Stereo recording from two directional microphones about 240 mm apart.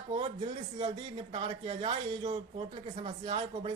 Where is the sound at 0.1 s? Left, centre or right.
Right.